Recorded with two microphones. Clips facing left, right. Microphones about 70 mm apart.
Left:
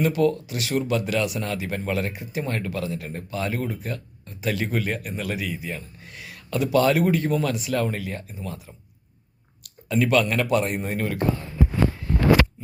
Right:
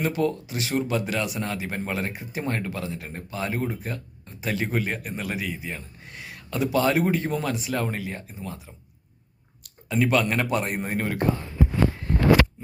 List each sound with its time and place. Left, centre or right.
0.0 s speech: right